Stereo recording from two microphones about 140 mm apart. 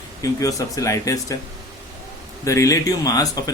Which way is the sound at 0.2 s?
25° left (ahead or behind).